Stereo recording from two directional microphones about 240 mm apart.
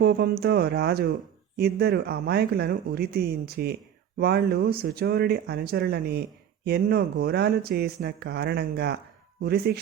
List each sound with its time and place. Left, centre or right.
0.0 s speech: right